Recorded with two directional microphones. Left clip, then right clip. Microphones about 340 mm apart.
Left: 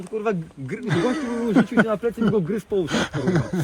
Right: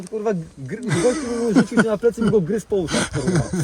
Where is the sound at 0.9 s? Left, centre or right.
Centre.